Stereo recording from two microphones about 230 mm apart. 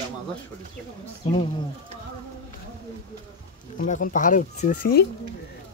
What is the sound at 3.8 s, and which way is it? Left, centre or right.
Speech, left.